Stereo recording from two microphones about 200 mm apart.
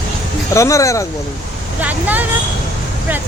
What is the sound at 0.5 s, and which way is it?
Speech, 15° left (ahead or behind).